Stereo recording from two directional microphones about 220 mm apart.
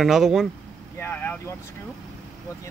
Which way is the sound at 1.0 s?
10° left (ahead or behind).